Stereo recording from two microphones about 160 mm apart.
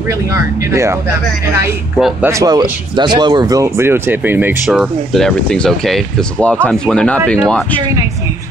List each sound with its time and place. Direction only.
0.3 s speech: 20° right (ahead or behind)
2.2 s speech: 20° right (ahead or behind)
4.6 s speech: centre (ahead or behind)